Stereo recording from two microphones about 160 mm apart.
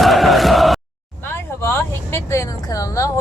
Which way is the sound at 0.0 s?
Centre (ahead or behind).